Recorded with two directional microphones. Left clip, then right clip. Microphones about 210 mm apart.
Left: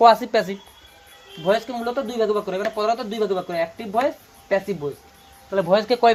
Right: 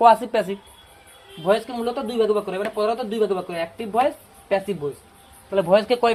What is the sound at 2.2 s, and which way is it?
Speech, 30° left (ahead or behind).